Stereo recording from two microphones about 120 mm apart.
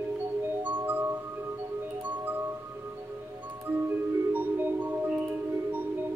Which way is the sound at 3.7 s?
15° right (ahead or behind).